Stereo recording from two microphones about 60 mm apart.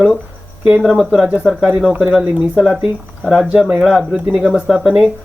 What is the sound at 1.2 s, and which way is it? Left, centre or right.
Speech, right.